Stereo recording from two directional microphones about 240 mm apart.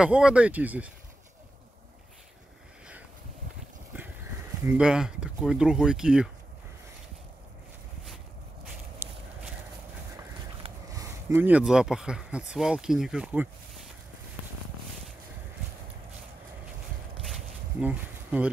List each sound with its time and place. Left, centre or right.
0.0 s speech: centre
4.6 s speech: centre
8.6 s walk: centre
10.6 s speech: centre
17.2 s a sound: centre